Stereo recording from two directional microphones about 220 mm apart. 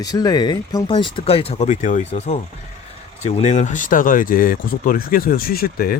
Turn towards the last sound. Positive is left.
turn(degrees=40)  # may be behind; listen again after turning